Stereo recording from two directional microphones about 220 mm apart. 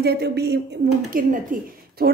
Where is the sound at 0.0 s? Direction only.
45° right (ahead or behind).